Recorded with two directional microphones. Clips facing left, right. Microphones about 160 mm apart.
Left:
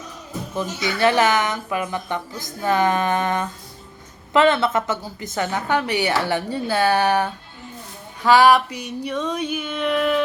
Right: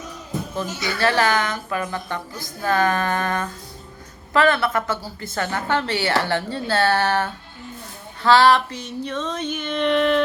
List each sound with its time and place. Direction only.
0.8 s a woman's voice: 20° left (ahead or behind)